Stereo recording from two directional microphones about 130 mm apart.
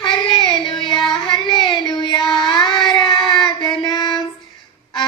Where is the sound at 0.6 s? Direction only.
35° left (ahead or behind).